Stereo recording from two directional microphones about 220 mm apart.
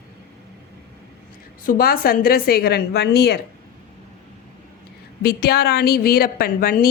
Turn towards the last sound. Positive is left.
turn(degrees=40)  # may be behind; listen again after turning